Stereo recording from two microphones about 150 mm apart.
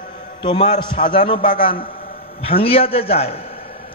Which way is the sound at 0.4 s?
30° left (ahead or behind).